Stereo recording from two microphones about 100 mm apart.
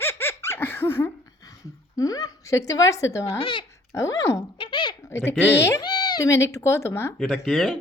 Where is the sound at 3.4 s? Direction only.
55° left (ahead or behind).